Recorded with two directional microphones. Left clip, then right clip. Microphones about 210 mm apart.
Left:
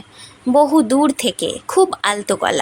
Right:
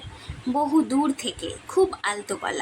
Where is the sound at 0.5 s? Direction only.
50° left (ahead or behind).